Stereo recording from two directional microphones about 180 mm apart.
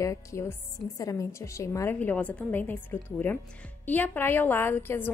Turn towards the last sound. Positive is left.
turn(degrees=10)  # may be behind; listen again after turning